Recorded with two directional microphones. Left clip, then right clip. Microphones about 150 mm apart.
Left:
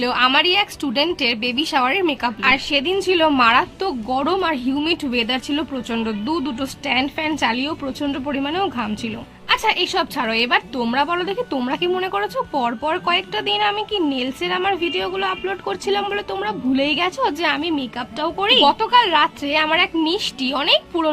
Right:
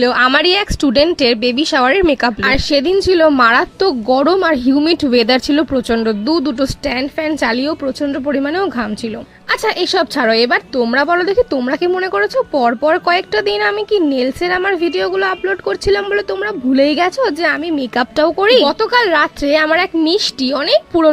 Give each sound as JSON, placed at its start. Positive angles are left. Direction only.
{"t": 0.0, "sound": "speech", "side_deg": -40}
{"t": 7.0, "sound": "a woman's voice", "side_deg": -25}
{"t": 7.4, "sound": "speech", "side_deg": -45}
{"t": 11.9, "sound": "a woman's voice", "side_deg": -30}
{"t": 12.5, "sound": "speech", "side_deg": -45}
{"t": 16.7, "sound": "speech", "side_deg": -45}
{"t": 17.2, "sound": "a woman's voice", "side_deg": -20}
{"t": 17.7, "sound": "speech", "side_deg": -60}